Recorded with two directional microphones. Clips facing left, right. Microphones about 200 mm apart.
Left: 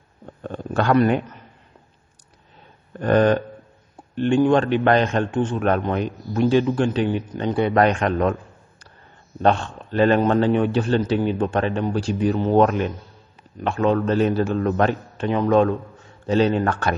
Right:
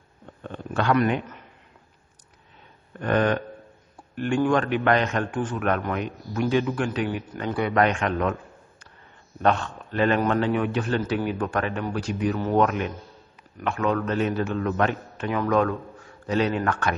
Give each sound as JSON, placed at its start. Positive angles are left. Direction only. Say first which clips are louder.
{"t": 0.4, "sound": "a sound", "louder": "left 4 dB", "side_deg": 40}
{"t": 3.0, "sound": "a man's voice", "louder": "left 5 dB", "side_deg": 35}
{"t": 9.4, "sound": "a man's voice", "louder": "left 3 dB", "side_deg": 30}